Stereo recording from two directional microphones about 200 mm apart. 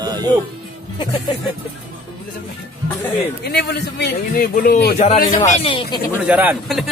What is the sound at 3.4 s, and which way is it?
A man's voice, 55° left (ahead or behind).